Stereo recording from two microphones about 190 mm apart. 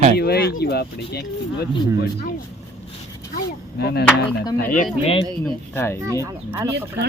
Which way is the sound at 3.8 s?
60° left (ahead or behind).